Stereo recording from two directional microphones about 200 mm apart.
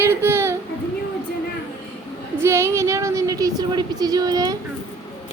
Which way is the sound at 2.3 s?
15° right (ahead or behind).